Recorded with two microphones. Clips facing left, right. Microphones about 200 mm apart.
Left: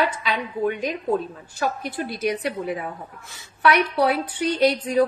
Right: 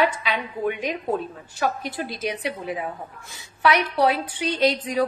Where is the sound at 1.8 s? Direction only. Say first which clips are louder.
Left 2 dB; 55° left (ahead or behind).